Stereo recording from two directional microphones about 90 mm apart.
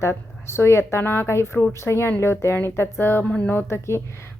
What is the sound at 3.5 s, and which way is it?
Speech, 25° left (ahead or behind).